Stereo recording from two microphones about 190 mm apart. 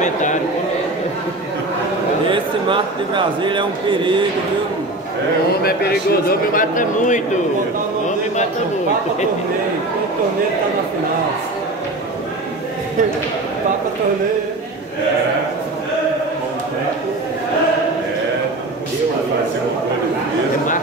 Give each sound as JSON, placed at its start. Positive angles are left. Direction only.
{"t": 0.0, "sound": "a sound", "side_deg": 40}
{"t": 2.3, "sound": "a man's voice", "side_deg": -25}
{"t": 6.5, "sound": "speech", "side_deg": 45}